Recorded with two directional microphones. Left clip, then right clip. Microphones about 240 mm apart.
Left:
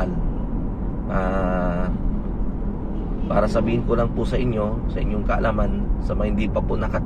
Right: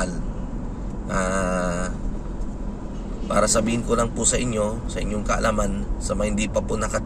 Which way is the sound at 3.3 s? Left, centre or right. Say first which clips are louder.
Even; right.